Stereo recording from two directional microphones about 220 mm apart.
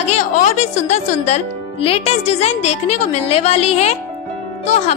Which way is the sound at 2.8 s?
90° left.